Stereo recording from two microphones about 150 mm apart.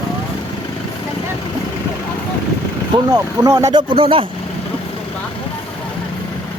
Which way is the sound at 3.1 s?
25° right (ahead or behind).